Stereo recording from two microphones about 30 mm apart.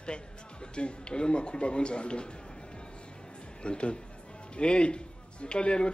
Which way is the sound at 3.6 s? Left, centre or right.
Left.